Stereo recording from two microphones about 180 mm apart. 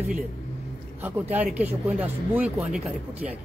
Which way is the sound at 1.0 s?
10° right (ahead or behind).